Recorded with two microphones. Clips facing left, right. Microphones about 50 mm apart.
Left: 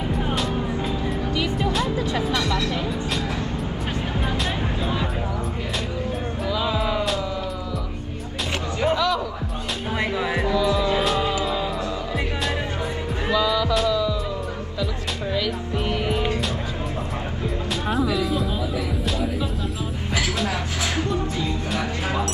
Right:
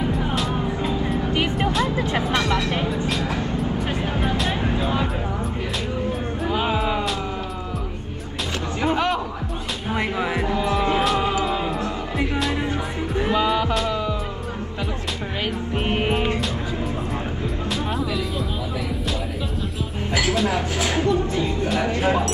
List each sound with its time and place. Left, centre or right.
1.3 s music: right
4.2 s music: centre
4.7 s music: centre
6.4 s music: right
8.9 s music: right
10.5 s music: right
13.3 s music: right
15.3 s music: right
20.1 s music: right
20.5 s a sound: right